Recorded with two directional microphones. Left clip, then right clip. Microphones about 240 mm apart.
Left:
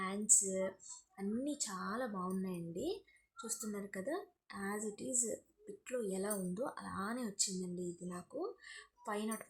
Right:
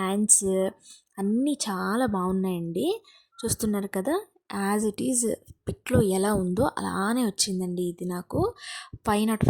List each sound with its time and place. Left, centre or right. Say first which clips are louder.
0.0 s speech: right 11 dB; right